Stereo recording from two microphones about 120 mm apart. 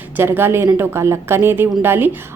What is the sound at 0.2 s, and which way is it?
A woman's voice, 20° right (ahead or behind).